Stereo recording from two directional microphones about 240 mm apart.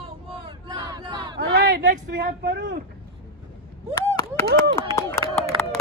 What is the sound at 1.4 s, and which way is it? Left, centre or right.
Speech, right.